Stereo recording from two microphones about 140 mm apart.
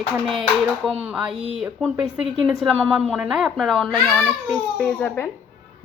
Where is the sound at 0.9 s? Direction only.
5° right (ahead or behind).